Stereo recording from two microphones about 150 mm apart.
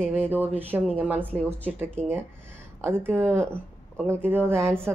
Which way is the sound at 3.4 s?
5° left (ahead or behind).